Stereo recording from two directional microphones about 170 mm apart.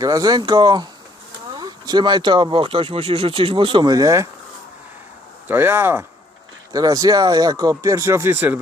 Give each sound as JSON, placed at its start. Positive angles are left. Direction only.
{"t": 0.0, "sound": "speech", "side_deg": -20}
{"t": 5.5, "sound": "speech", "side_deg": -10}